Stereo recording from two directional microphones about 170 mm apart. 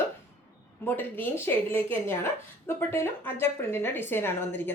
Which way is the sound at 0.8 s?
10° left (ahead or behind).